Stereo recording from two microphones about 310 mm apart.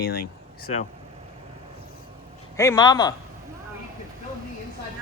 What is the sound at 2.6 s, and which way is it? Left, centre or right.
Speech, centre.